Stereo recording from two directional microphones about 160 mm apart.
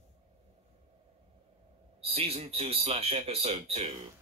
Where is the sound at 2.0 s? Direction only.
40° right (ahead or behind).